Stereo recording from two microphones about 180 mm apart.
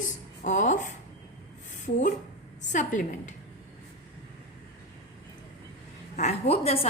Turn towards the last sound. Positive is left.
turn(degrees=35)  # may be behind; listen again after turning